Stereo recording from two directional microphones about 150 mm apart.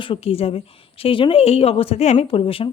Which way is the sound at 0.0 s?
40° left (ahead or behind).